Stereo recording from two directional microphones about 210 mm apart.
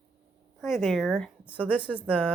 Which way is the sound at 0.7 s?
Centre (ahead or behind).